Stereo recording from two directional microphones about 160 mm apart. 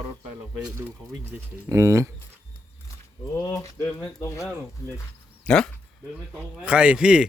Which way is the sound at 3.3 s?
20° left (ahead or behind).